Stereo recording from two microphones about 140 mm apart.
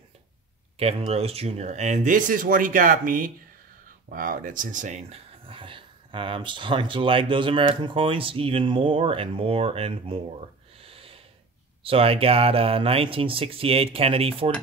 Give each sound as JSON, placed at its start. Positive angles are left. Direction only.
{"t": 0.7, "sound": "speech", "side_deg": -45}
{"t": 10.8, "sound": "snort", "side_deg": -40}
{"t": 11.8, "sound": "speech", "side_deg": -40}